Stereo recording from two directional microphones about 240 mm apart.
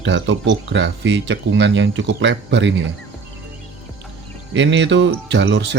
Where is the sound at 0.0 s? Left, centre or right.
Right.